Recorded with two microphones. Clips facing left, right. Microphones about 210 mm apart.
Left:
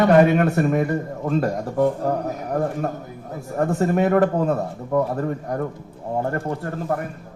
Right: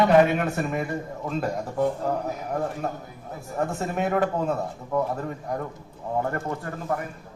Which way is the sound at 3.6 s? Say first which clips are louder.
Left 7 dB; 50° left (ahead or behind).